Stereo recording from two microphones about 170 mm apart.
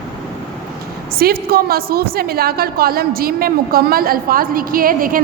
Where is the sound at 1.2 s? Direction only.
65° right (ahead or behind).